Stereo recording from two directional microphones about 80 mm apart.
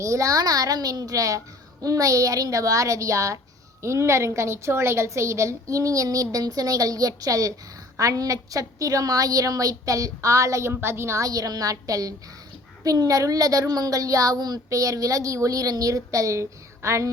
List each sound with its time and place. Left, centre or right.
0.0 s a woman's voice: right